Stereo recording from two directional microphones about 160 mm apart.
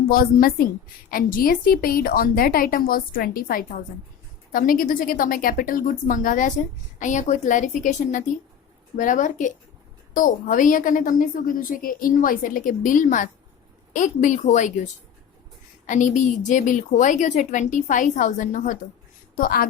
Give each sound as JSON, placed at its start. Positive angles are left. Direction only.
{"t": 0.1, "sound": "a woman's voice", "side_deg": 65}
{"t": 15.9, "sound": "a woman's voice", "side_deg": 50}